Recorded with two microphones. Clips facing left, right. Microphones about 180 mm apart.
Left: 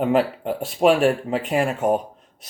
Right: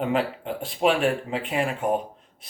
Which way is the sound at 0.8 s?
45° left (ahead or behind).